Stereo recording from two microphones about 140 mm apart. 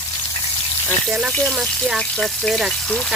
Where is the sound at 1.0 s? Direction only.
Centre (ahead or behind).